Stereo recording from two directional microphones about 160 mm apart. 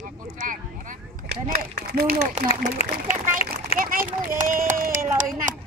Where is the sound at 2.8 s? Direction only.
40° left (ahead or behind).